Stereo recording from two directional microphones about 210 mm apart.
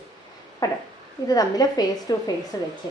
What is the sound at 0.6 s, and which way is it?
A woman's voice, 20° left (ahead or behind).